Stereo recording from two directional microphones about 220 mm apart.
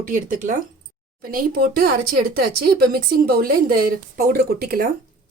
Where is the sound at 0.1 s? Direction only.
35° right (ahead or behind).